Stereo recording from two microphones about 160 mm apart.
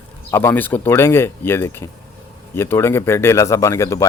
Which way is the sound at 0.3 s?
15° left (ahead or behind).